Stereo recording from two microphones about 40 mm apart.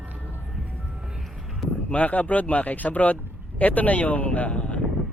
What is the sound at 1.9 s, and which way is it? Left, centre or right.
Speech, left.